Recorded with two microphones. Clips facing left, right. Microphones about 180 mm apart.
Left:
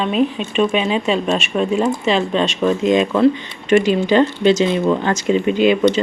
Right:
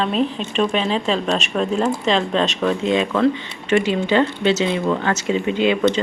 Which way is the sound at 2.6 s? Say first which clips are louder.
Left 4 dB; 15° left (ahead or behind).